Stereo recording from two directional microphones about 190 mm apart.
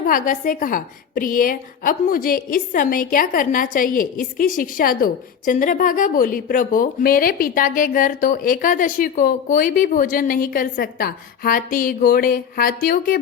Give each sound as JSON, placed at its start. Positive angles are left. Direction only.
{"t": 0.0, "sound": "a woman's voice", "side_deg": 45}